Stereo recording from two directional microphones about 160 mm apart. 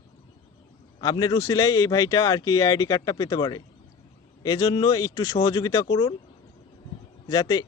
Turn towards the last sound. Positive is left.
turn(degrees=25)  # may be behind; listen again after turning